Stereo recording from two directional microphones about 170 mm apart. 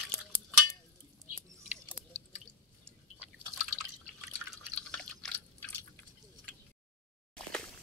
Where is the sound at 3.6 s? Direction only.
Centre (ahead or behind).